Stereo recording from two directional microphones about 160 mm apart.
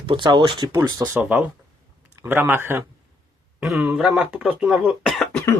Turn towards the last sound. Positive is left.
turn(degrees=0)  # may be behind; listen again after turning